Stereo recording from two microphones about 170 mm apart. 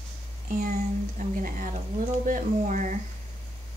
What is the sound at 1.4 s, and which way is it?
A woman's voice, 55° right (ahead or behind).